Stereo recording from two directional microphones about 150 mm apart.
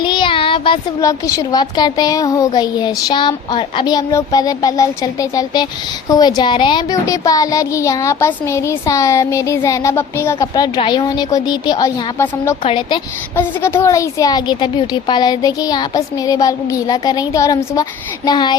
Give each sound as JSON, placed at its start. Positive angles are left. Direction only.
{"t": 0.0, "sound": "child singing", "side_deg": 30}
{"t": 1.0, "sound": "a child's voice", "side_deg": 20}
{"t": 13.3, "sound": "a child's voice", "side_deg": 15}